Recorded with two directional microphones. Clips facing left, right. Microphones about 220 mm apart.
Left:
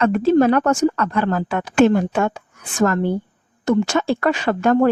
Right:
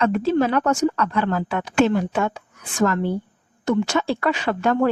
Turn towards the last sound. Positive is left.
turn(degrees=45)  # may be behind; listen again after turning